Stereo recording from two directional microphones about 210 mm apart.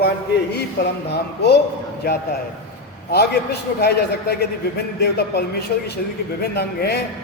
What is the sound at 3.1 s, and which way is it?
A man's voice, 50° left (ahead or behind).